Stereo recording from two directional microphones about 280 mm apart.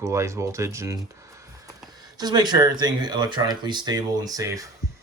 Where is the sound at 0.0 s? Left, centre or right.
Centre.